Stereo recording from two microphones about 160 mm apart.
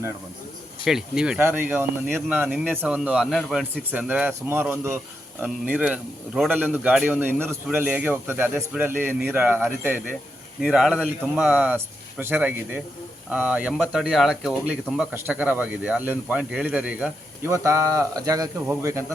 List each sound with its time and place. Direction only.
0.9 s a man's voice: 5° right (ahead or behind)
17.5 s speech: 20° right (ahead or behind)